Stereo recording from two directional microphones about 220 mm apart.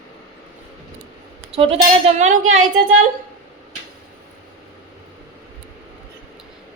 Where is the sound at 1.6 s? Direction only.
30° right (ahead or behind).